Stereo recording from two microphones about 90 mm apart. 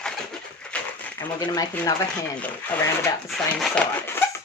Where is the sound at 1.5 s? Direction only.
45° left (ahead or behind).